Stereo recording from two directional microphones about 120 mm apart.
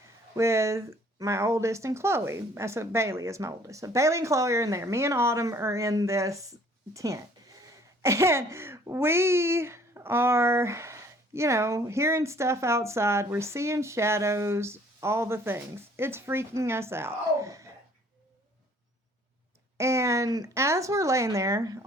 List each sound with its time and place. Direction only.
0.3 s speech: 25° right (ahead or behind)
19.7 s speech: 25° right (ahead or behind)